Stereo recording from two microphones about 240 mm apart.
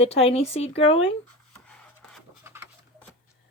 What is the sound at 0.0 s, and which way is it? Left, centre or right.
Speech, left.